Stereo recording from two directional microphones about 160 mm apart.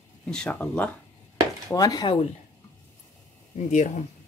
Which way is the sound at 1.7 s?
20° left (ahead or behind).